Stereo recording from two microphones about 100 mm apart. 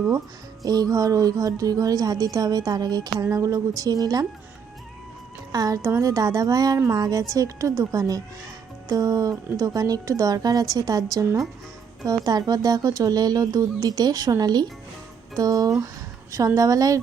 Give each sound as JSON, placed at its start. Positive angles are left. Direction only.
{"t": 0.6, "sound": "a woman's voice", "side_deg": -40}
{"t": 5.5, "sound": "a woman's voice", "side_deg": -40}
{"t": 15.8, "sound": "a sound", "side_deg": -35}
{"t": 16.6, "sound": "a woman's voice", "side_deg": -35}